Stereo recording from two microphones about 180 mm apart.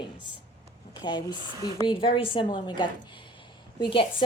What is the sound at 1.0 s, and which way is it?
A woman's voice, 25° left (ahead or behind).